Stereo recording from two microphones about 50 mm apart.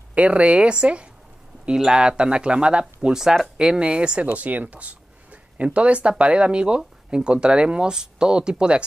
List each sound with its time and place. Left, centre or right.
0.1 s speech: right
3.1 s speech: centre
4.3 s speech: right; by 8.8 s centre